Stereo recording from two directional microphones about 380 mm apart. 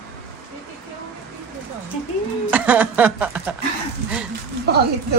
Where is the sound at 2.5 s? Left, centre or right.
Centre.